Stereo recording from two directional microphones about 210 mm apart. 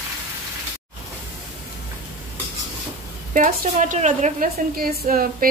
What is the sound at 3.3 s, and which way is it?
A woman's voice, 40° right (ahead or behind).